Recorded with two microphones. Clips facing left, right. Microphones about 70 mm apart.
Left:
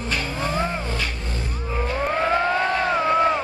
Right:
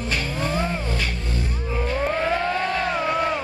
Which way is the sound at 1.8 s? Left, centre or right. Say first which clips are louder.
Left 1 dB; centre.